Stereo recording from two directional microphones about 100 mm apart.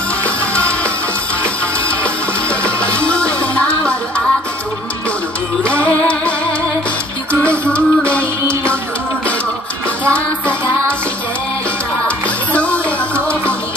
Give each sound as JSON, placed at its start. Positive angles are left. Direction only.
{"t": 2.6, "sound": "music", "side_deg": 10}
{"t": 5.7, "sound": "music", "side_deg": 15}
{"t": 7.7, "sound": "music", "side_deg": 10}
{"t": 12.5, "sound": "music", "side_deg": 15}